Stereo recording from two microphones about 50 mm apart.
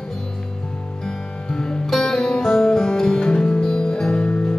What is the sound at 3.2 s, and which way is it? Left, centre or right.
Music, left.